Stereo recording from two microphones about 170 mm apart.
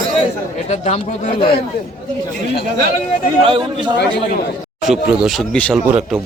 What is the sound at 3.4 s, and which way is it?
Speech, 30° right (ahead or behind).